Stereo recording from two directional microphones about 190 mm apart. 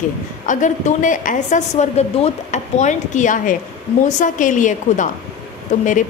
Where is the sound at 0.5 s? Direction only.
40° left (ahead or behind).